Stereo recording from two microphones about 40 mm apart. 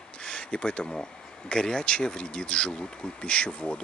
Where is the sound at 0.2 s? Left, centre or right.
Left.